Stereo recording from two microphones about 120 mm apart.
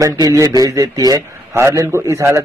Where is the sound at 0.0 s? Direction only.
30° right (ahead or behind).